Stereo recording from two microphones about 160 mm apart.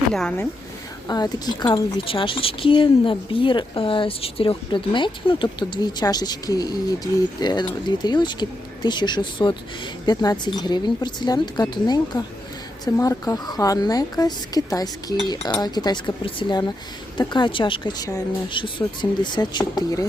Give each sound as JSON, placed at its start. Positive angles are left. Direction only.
{"t": 0.1, "sound": "speech", "side_deg": 5}
{"t": 1.0, "sound": "a woman's voice", "side_deg": 25}